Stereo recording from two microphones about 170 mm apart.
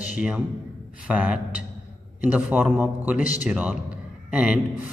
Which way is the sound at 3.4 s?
10° right (ahead or behind).